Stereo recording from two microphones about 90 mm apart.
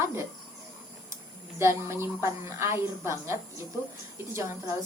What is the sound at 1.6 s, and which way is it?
Speech, 30° right (ahead or behind).